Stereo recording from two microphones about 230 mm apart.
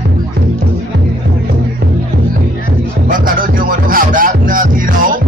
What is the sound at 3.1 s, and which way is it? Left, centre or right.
Music, right.